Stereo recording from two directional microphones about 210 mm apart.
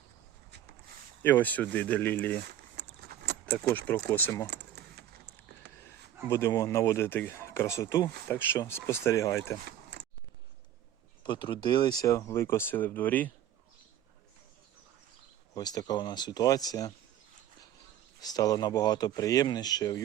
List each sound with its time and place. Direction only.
1.2 s speech: 10° left (ahead or behind)
2.7 s a sound: 50° right (ahead or behind)
3.6 s speech: 10° left (ahead or behind)
4.4 s keys jangling: 50° right (ahead or behind)
6.2 s speech: 15° left (ahead or behind)
9.6 s a sound: 50° right (ahead or behind)
11.2 s speech: 20° left (ahead or behind)
15.5 s speech: 20° left (ahead or behind)
18.2 s speech: 20° left (ahead or behind)